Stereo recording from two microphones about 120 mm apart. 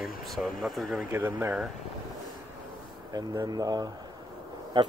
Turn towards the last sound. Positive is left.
turn(degrees=-40)  # may be behind; listen again after turning